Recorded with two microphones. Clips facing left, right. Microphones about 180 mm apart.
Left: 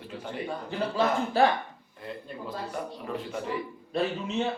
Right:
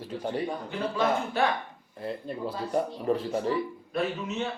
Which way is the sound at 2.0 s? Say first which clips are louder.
Right 6 dB; 35° right (ahead or behind).